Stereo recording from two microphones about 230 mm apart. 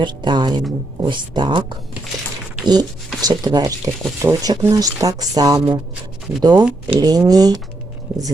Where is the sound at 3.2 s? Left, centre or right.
Centre.